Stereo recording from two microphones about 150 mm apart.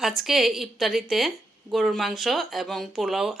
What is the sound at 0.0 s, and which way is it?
Speech, centre (ahead or behind).